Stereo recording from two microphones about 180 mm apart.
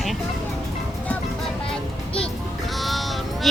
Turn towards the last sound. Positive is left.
turn(degrees=0)  # may be behind; listen again after turning